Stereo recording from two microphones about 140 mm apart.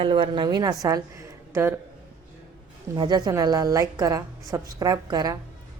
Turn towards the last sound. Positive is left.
turn(degrees=-30)  # may be behind; listen again after turning